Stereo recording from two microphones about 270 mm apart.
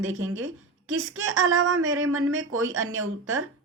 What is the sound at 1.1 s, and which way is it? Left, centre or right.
Speech, right.